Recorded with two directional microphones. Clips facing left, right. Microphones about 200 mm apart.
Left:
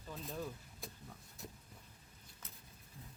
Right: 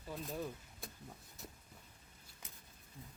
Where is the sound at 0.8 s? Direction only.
Centre (ahead or behind).